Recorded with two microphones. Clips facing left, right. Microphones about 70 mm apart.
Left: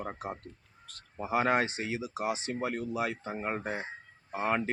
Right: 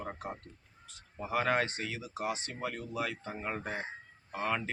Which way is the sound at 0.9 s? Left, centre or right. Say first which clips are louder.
Left 4 dB; centre.